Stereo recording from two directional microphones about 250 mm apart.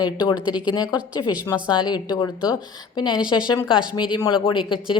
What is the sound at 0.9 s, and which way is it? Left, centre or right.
Speech, centre.